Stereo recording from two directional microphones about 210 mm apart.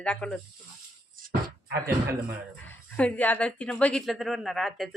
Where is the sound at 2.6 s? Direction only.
5° left (ahead or behind).